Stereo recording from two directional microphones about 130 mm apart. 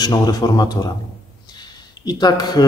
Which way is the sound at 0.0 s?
30° left (ahead or behind).